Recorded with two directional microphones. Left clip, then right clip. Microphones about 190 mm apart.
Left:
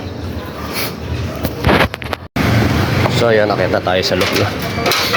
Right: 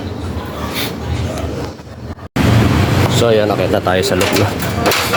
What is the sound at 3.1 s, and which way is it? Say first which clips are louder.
Speech: even; 15° right (ahead or behind).